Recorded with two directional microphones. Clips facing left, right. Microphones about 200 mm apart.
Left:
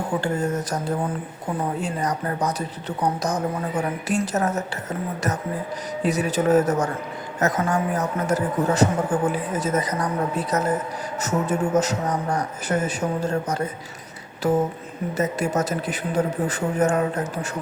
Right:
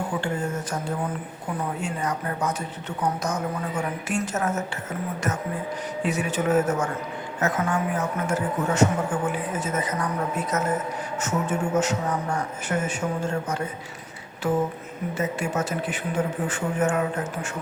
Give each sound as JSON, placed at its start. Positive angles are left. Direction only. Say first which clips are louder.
{"t": 0.2, "sound": "a man's voice", "louder": "left 4 dB", "side_deg": 40}
{"t": 6.0, "sound": "a man's voice", "louder": "left 4 dB", "side_deg": 35}